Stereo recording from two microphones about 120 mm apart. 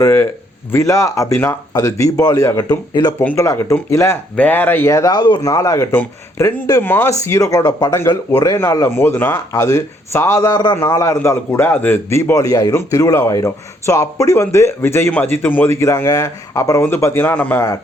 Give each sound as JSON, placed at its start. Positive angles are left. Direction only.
{"t": 0.0, "sound": "speech", "side_deg": 20}
{"t": 4.4, "sound": "a man's voice", "side_deg": 15}
{"t": 9.5, "sound": "speech", "side_deg": 25}
{"t": 10.8, "sound": "a man's voice", "side_deg": 25}